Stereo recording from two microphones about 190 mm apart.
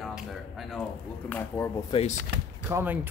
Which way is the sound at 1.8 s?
30° left (ahead or behind).